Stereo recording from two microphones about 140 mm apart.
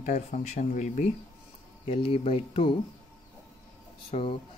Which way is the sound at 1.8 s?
40° left (ahead or behind).